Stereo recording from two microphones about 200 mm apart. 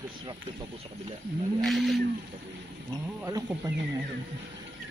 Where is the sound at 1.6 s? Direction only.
Centre (ahead or behind).